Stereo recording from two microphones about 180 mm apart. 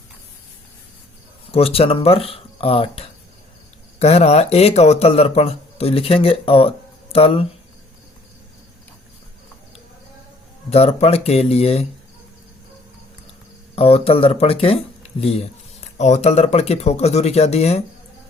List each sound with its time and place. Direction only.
1.5 s speech: 35° left (ahead or behind)
10.7 s speech: 35° left (ahead or behind)
13.7 s speech: 35° left (ahead or behind)